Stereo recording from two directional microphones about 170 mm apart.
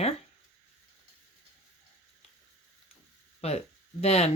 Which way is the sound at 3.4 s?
40° left (ahead or behind).